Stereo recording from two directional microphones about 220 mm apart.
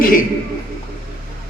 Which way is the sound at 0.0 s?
40° left (ahead or behind).